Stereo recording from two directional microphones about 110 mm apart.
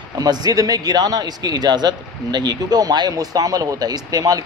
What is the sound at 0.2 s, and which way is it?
Speech, 35° right (ahead or behind).